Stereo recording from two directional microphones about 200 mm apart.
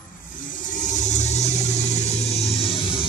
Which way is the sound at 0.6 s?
40° left (ahead or behind).